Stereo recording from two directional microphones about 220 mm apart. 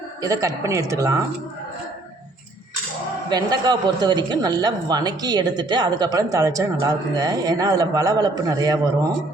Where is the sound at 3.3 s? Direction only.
20° right (ahead or behind).